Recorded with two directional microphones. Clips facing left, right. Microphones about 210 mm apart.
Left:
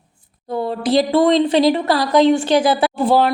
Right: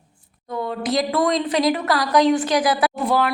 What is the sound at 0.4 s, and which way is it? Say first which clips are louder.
Speech: left 4 dB; 30° left (ahead or behind).